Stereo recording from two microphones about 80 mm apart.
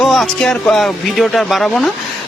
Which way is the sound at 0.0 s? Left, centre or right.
Centre.